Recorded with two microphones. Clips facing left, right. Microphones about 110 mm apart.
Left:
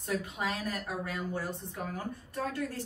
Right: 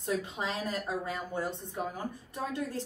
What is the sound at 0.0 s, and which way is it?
Speech, 25° right (ahead or behind).